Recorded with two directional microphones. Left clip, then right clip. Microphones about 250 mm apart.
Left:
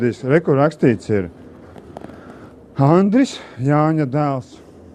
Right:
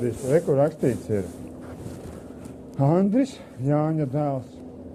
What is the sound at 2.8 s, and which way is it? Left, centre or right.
Speech, left.